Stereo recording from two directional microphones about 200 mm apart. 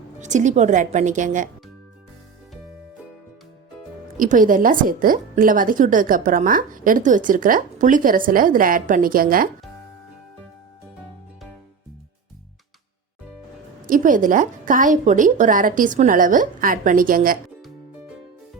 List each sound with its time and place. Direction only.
0.2 s a woman's voice: 35° right (ahead or behind)
4.2 s a woman's voice: 40° right (ahead or behind)
13.8 s a woman's voice: 40° right (ahead or behind)